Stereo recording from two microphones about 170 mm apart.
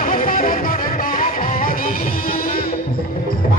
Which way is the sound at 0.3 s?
55° left (ahead or behind).